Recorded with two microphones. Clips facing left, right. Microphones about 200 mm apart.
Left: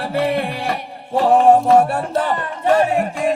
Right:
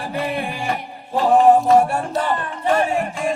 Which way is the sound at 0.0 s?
70° left (ahead or behind).